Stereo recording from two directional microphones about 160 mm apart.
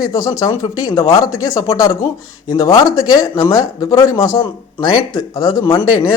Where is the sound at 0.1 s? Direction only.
20° left (ahead or behind).